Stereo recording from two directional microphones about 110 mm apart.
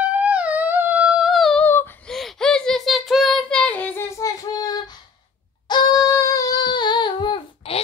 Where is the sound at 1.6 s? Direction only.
20° left (ahead or behind).